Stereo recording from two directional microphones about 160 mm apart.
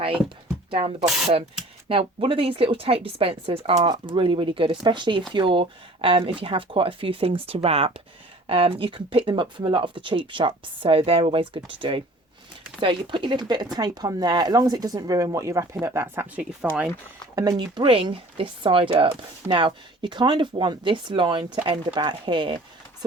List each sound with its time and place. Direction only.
0.7 s speech: 35° right (ahead or behind); by 16.9 s 5° right (ahead or behind)
17.6 s speech: 30° right (ahead or behind)